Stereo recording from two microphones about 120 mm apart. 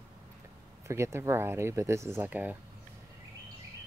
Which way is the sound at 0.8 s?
25° right (ahead or behind).